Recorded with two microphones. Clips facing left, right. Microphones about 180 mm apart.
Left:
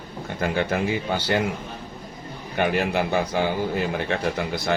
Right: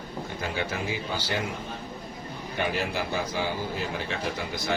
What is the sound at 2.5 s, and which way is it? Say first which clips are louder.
Speech: left 7 dB; 60° left (ahead or behind).